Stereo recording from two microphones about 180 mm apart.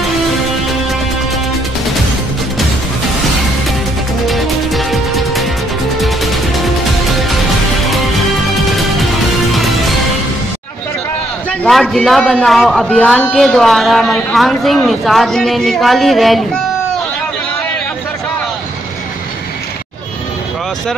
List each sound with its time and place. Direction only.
4.3 s music: centre (ahead or behind)
11.6 s a man's voice: 5° left (ahead or behind)